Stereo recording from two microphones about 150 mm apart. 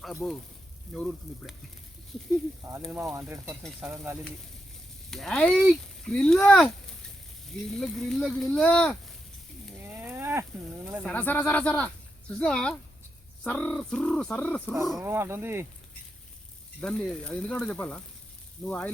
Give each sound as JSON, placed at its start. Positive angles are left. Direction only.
{"t": 0.0, "sound": "speech", "side_deg": 0}
{"t": 3.1, "sound": "speech", "side_deg": -5}
{"t": 5.1, "sound": "speech", "side_deg": 5}
{"t": 9.9, "sound": "a sound", "side_deg": -15}
{"t": 11.0, "sound": "speech", "side_deg": 10}
{"t": 15.0, "sound": "speech", "side_deg": -15}
{"t": 16.8, "sound": "speech", "side_deg": 5}